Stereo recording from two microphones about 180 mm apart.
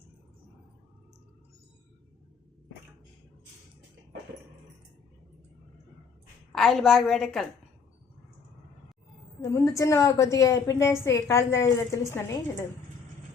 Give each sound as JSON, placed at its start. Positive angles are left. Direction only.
{"t": 6.5, "sound": "a woman's voice", "side_deg": 0}
{"t": 9.4, "sound": "a woman's voice", "side_deg": 15}